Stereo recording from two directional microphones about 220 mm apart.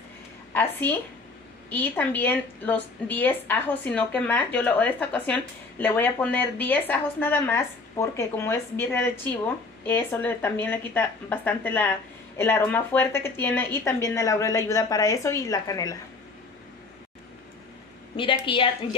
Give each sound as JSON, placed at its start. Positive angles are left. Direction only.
{"t": 0.5, "sound": "a woman's voice", "side_deg": 10}
{"t": 18.4, "sound": "a woman's voice", "side_deg": 25}